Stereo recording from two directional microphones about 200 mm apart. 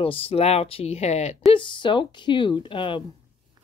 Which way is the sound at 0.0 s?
25° left (ahead or behind).